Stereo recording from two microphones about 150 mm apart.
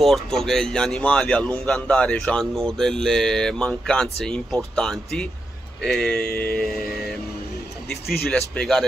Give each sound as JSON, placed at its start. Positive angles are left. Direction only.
{"t": 0.0, "sound": "speech", "side_deg": 0}
{"t": 6.3, "sound": "speech", "side_deg": 90}
{"t": 8.3, "sound": "speech", "side_deg": 5}